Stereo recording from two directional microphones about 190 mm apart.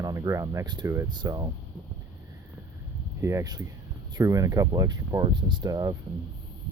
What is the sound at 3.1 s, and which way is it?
Speech, 15° right (ahead or behind).